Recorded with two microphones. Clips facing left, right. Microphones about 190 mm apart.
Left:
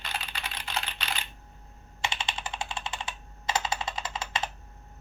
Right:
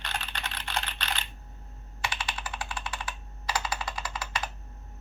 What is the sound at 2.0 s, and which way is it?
Computer keyboard, 25° left (ahead or behind).